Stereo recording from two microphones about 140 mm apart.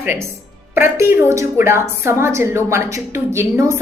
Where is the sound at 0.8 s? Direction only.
15° right (ahead or behind).